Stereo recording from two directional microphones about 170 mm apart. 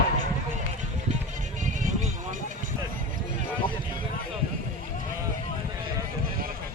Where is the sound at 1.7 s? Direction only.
50° right (ahead or behind).